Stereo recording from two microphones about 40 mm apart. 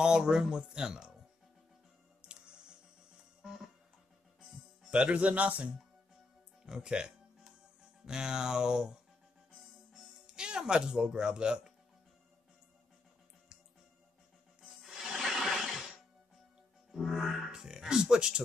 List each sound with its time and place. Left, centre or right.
0.0 s speech: centre
2.2 s music: right
4.9 s a man's voice: right
6.6 s speech: centre
10.2 s music: right
10.6 s speech: centre
14.8 s music: centre
16.9 s music: centre
17.6 s speech: centre